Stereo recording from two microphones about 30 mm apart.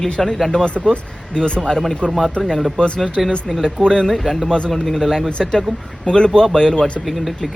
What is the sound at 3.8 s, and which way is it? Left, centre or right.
Speech, left.